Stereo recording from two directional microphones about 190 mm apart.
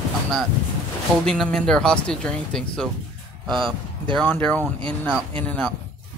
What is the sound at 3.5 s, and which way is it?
Speech, 25° right (ahead or behind).